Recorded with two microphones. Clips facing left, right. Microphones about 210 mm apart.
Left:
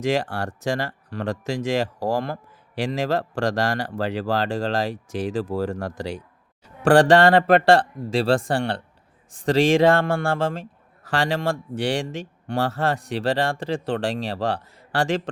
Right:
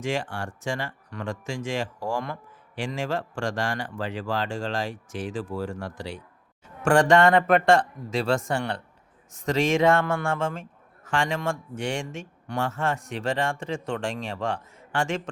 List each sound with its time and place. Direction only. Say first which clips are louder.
0.0 s speech: left 6 dB; 40° left (ahead or behind)